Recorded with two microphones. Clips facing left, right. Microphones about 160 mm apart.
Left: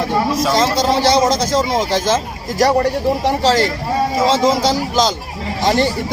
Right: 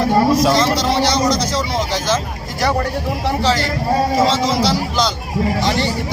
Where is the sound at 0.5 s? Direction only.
50° left (ahead or behind).